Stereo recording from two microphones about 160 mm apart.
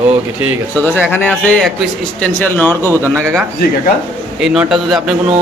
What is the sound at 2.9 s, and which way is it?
Speech, 15° right (ahead or behind).